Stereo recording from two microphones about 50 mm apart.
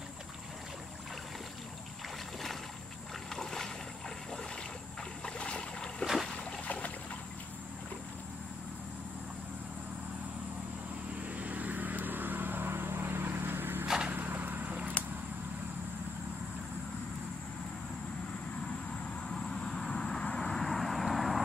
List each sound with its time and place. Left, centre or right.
3.3 s boat: centre
5.2 s boat: centre
6.3 s boat: left
11.2 s vehicle: right
13.8 s vehicle: centre
14.1 s vehicle: right
19.3 s vehicle: centre
20.5 s vehicle: centre